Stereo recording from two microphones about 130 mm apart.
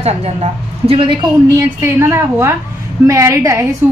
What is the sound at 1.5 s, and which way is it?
A woman's voice, 20° right (ahead or behind).